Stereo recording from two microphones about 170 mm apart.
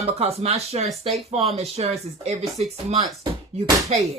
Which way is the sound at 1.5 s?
35° right (ahead or behind).